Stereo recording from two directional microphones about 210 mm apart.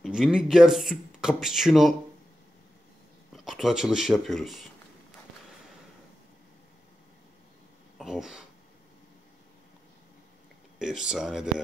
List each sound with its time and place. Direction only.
0.0 s speech: centre (ahead or behind)
3.3 s speech: centre (ahead or behind)
8.0 s speech: 5° right (ahead or behind)
10.8 s speech: 5° right (ahead or behind)